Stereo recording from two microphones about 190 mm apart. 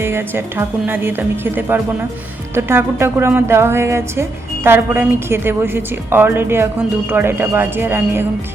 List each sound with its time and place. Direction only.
0.0 s a woman's voice: 15° right (ahead or behind)